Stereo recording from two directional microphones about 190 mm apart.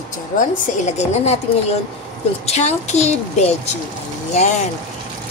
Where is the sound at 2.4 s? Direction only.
35° left (ahead or behind).